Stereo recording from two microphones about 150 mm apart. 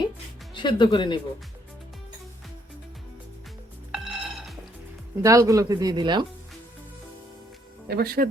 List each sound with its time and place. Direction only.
0.5 s speech: 30° left (ahead or behind)
3.9 s music: 5° right (ahead or behind)
5.2 s speech: 20° right (ahead or behind)
7.9 s speech: 90° right